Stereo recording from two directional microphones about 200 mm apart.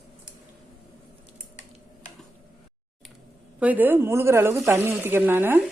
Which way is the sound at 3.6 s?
10° right (ahead or behind).